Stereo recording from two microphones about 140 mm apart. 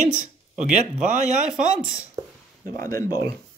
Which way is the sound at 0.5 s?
60° right (ahead or behind).